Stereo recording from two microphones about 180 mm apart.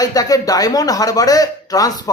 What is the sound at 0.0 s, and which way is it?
A man's voice, 20° left (ahead or behind).